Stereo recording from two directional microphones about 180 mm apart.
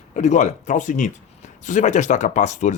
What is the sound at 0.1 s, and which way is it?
A man's voice, 40° left (ahead or behind).